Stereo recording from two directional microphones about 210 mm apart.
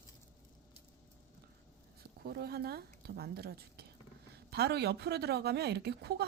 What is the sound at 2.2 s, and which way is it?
A woman's voice, 50° right (ahead or behind).